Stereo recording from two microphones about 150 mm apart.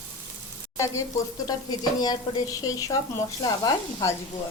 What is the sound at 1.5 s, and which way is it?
Speech, 25° left (ahead or behind).